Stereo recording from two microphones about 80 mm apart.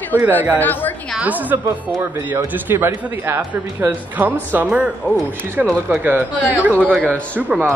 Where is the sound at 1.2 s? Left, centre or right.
Right.